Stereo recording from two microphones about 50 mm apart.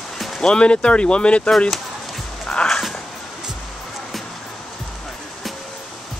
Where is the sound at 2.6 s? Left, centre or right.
Centre.